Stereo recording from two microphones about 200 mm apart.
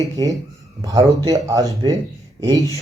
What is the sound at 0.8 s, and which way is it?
Speech, 20° right (ahead or behind).